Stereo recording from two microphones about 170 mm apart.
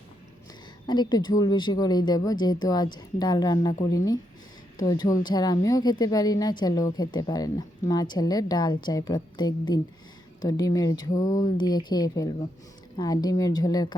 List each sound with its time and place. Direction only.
0.9 s a woman's voice: 25° left (ahead or behind)